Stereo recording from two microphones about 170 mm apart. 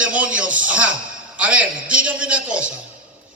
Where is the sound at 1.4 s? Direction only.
5° right (ahead or behind).